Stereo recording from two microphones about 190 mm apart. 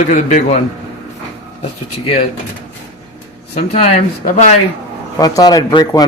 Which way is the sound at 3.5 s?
35° left (ahead or behind).